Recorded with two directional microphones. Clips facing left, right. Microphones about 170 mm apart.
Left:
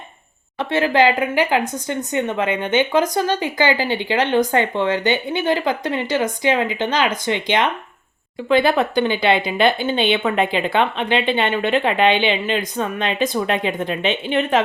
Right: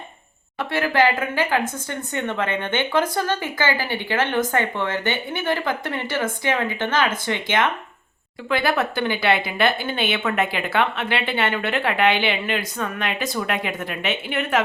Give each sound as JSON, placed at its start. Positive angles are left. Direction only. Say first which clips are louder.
{"t": 0.6, "sound": "speech", "louder": "left 3 dB", "side_deg": 20}